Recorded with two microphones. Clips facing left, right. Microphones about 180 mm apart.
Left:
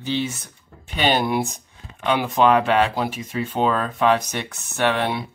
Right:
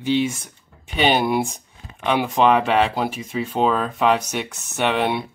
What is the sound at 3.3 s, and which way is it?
Speech, centre (ahead or behind).